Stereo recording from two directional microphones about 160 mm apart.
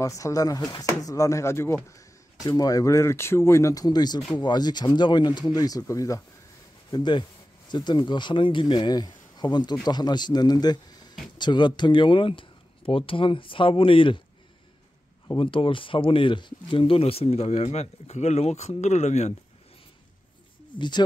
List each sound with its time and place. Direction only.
0.0 s speech: 20° left (ahead or behind)
15.3 s speech: 35° left (ahead or behind)
20.7 s speech: 30° left (ahead or behind)